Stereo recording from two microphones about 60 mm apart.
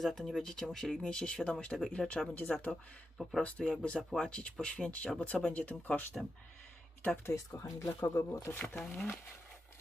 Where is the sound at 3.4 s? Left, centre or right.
Centre.